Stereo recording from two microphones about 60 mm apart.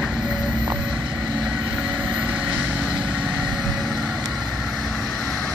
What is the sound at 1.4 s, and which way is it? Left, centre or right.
Vehicle, centre.